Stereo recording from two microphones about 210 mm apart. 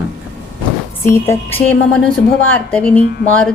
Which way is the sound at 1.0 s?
10° left (ahead or behind).